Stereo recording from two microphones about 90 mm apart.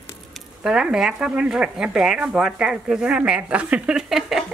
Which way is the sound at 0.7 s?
10° right (ahead or behind).